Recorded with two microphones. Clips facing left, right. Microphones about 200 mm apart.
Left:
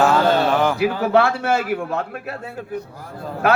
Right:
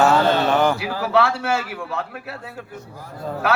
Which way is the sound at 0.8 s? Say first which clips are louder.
Left 3 dB; 50° left (ahead or behind).